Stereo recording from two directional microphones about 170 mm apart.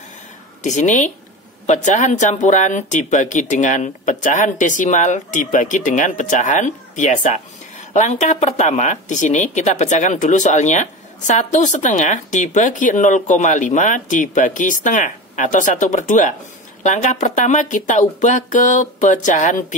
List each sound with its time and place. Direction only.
0.7 s speech: 45° left (ahead or behind)